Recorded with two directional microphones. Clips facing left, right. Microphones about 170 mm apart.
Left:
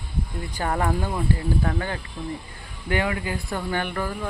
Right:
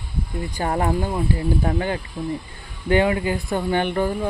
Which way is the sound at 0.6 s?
25° right (ahead or behind).